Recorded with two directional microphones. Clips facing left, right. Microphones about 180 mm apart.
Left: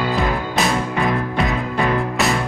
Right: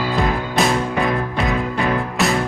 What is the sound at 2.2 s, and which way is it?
Music, centre (ahead or behind).